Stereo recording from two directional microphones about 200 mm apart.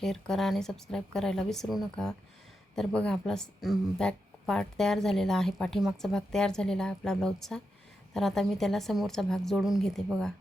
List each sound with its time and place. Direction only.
0.0 s speech: centre (ahead or behind)